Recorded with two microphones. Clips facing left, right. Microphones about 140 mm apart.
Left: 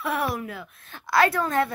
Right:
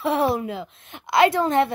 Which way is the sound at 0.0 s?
25° right (ahead or behind).